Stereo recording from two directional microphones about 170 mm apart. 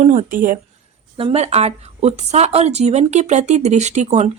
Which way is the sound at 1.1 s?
35° right (ahead or behind).